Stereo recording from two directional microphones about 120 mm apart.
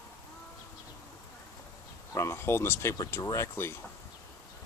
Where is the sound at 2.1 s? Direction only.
25° left (ahead or behind).